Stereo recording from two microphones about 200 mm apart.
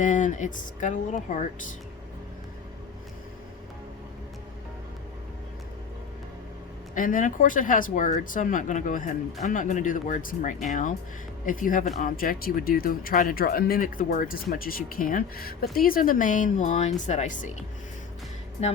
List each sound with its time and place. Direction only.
0.0 s speech: 40° left (ahead or behind)
6.9 s speech: 40° left (ahead or behind)